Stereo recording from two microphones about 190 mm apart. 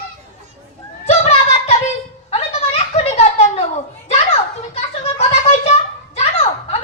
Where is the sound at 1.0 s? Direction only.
30° left (ahead or behind).